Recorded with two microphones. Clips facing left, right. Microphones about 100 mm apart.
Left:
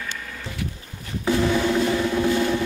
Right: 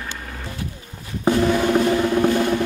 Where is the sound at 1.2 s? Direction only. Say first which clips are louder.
Right 3 dB; 50° right (ahead or behind).